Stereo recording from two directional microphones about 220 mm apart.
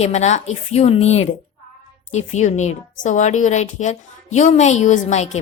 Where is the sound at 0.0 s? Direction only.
30° left (ahead or behind).